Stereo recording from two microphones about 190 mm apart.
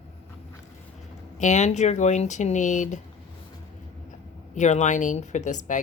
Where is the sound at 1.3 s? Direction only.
40° left (ahead or behind).